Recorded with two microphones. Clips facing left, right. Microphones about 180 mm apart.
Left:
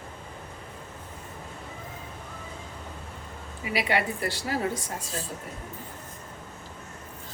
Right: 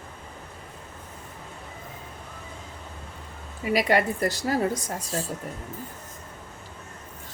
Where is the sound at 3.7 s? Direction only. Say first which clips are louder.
Right 5 dB; 45° right (ahead or behind).